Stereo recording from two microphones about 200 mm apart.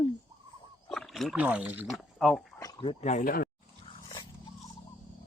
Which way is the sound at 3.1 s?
45° left (ahead or behind).